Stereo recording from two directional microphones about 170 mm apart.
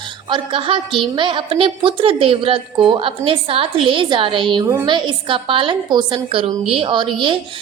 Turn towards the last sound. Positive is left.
turn(degrees=-30)  # may be behind; listen again after turning